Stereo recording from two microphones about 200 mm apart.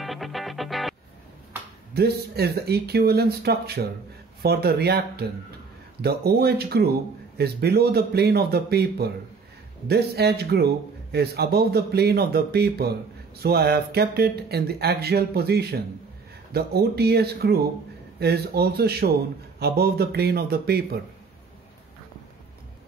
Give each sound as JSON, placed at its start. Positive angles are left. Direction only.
{"t": 0.0, "sound": "music", "side_deg": 0}
{"t": 2.0, "sound": "a man's voice", "side_deg": -50}